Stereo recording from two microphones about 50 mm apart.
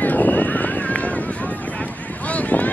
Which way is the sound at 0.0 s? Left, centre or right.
Left.